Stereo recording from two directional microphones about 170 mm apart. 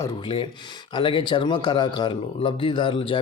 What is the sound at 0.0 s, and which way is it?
Speech, 25° left (ahead or behind).